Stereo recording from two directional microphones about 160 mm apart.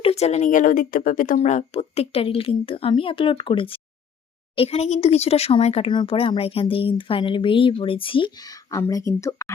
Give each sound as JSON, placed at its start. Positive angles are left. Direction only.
{"t": 0.0, "sound": "speech", "side_deg": 40}